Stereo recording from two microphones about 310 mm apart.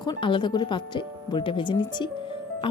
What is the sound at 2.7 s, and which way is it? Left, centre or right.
Music, centre.